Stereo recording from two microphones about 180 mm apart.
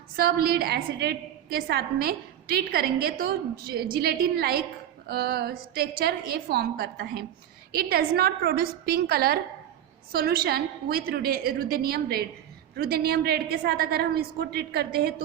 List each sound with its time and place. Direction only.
0.2 s a woman's voice: 60° right (ahead or behind)